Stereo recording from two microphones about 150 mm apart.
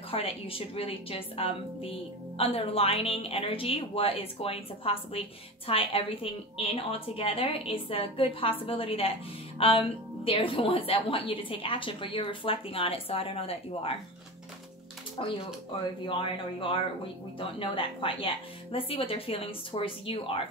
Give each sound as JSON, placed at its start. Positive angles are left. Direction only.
{"t": 0.1, "sound": "a woman's voice", "side_deg": 40}
{"t": 15.2, "sound": "a woman's voice", "side_deg": 35}